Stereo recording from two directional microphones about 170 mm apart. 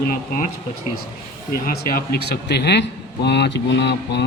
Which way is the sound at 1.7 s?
60° left (ahead or behind).